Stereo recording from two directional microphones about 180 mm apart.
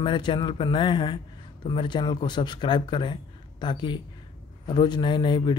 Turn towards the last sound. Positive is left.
turn(degrees=25)  # may be behind; listen again after turning